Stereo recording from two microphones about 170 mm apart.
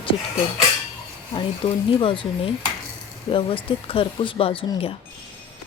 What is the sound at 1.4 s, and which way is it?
Speech, 30° left (ahead or behind).